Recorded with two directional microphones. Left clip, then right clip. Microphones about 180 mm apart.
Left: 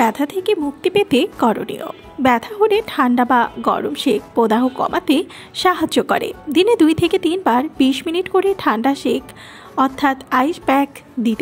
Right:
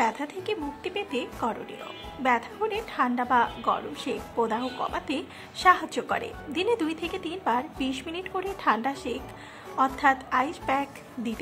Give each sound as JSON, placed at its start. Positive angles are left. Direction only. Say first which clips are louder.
{"t": 0.0, "sound": "a woman's voice", "louder": "left 10 dB", "side_deg": 40}